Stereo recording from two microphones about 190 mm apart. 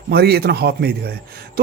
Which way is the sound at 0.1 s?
55° right (ahead or behind).